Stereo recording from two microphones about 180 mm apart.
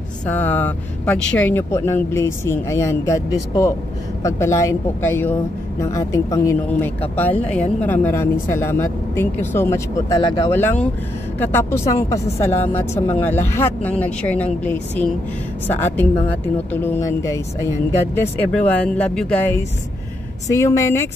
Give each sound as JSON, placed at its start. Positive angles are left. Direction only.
{"t": 0.3, "sound": "speech", "side_deg": 10}
{"t": 10.5, "sound": "speech", "side_deg": 10}